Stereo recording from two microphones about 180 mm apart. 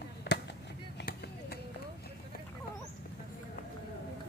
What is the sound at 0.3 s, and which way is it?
Chop, 75° left (ahead or behind).